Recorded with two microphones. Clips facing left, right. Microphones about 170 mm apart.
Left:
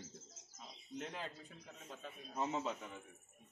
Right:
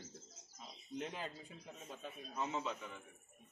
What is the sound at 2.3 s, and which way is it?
Speech, 40° left (ahead or behind).